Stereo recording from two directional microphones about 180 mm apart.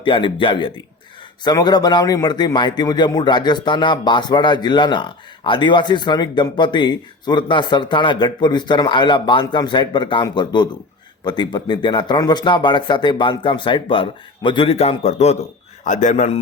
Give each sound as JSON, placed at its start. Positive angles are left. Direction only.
{"t": 0.0, "sound": "a man's voice", "side_deg": 25}